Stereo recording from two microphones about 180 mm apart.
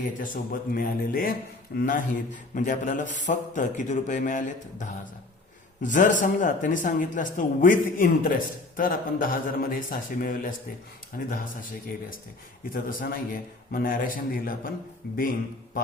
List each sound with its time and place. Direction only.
0.0 s a man's voice: 50° left (ahead or behind)
12.7 s a man's voice: 50° left (ahead or behind)